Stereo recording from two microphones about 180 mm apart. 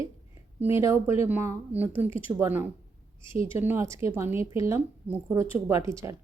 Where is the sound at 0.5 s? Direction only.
15° right (ahead or behind).